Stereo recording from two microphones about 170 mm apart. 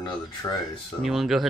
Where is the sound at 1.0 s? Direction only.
Centre (ahead or behind).